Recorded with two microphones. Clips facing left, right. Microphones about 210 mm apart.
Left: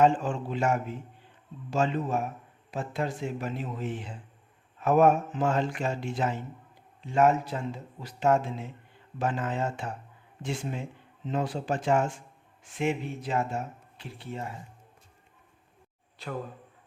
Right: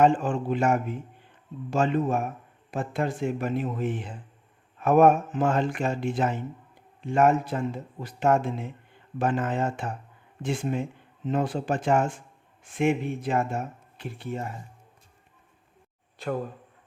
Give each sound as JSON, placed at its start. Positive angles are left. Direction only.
{"t": 0.0, "sound": "speech", "side_deg": -55}
{"t": 16.2, "sound": "speech", "side_deg": -50}